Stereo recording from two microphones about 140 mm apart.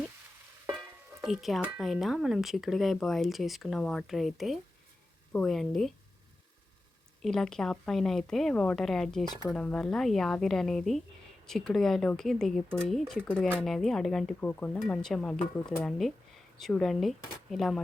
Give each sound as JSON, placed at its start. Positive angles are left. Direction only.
{"t": 0.8, "sound": "music", "side_deg": 0}
{"t": 1.6, "sound": "speech", "side_deg": -5}
{"t": 7.2, "sound": "speech", "side_deg": 5}